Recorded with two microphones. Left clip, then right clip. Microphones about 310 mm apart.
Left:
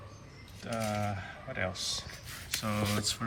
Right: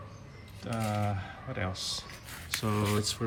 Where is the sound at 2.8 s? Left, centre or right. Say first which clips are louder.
Right 1 dB; centre.